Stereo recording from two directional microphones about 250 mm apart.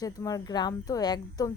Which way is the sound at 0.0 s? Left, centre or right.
Centre.